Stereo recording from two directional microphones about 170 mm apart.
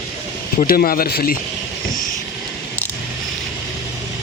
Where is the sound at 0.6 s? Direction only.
60° left (ahead or behind).